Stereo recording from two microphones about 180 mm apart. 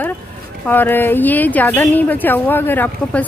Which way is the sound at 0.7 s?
10° left (ahead or behind).